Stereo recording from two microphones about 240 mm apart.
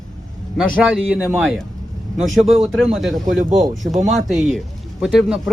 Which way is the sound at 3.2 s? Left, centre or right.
Right.